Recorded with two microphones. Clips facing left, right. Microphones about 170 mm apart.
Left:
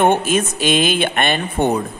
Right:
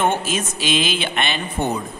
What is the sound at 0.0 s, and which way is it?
A man's voice, 55° left (ahead or behind).